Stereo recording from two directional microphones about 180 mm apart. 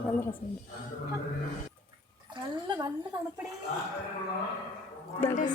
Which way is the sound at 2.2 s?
25° right (ahead or behind).